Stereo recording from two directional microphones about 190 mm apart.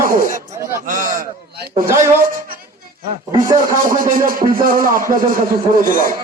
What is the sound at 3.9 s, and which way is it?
A man's voice, 45° right (ahead or behind).